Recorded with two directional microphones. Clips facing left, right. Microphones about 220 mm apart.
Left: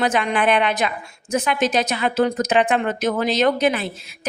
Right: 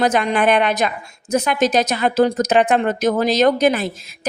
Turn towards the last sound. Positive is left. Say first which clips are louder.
# right 4 dB
turn(degrees=-40)  # may be behind; listen again after turning